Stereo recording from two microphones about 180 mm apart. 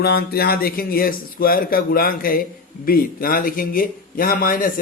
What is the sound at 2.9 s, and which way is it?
Mantra, 55° left (ahead or behind).